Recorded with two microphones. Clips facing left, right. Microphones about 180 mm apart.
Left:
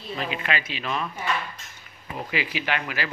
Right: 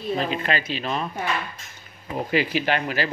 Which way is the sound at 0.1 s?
35° right (ahead or behind).